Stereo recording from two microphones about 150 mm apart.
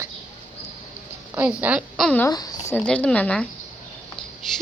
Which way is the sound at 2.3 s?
25° left (ahead or behind).